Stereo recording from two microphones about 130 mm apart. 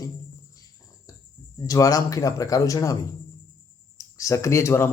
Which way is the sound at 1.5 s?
25° left (ahead or behind).